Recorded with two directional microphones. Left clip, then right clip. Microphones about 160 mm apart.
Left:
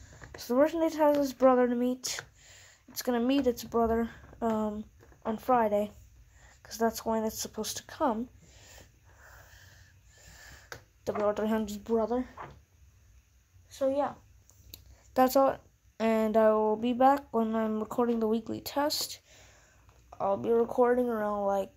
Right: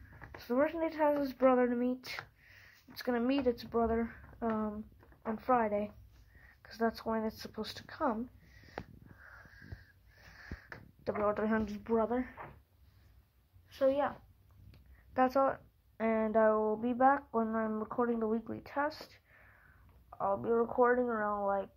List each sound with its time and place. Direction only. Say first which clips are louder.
0.4 s speech: left 6 dB; 25° left (ahead or behind)
11.2 s speech: left 3 dB; 20° left (ahead or behind)
13.7 s a woman's voice: left 1 dB; centre (ahead or behind)
14.7 s speech: left 9 dB; 45° left (ahead or behind)
20.1 s a sound: left 4 dB; 40° left (ahead or behind)
20.7 s speech: left 3 dB; 40° left (ahead or behind)